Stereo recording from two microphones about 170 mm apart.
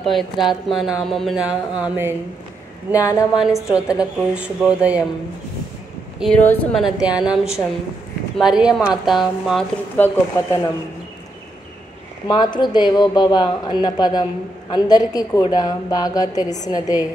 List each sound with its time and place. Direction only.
0.0 s a woman's voice: centre (ahead or behind)
2.9 s a woman's voice: 20° left (ahead or behind)
3.9 s speech: 5° right (ahead or behind)
6.1 s speech: centre (ahead or behind)
6.4 s speech: 10° left (ahead or behind)
6.8 s a woman's voice: 5° right (ahead or behind)
9.9 s speech: 10° left (ahead or behind)
12.3 s a woman's voice: 25° left (ahead or behind)